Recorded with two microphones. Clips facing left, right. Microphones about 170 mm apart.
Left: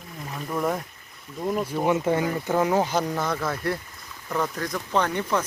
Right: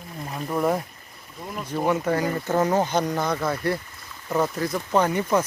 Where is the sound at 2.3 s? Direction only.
10° left (ahead or behind).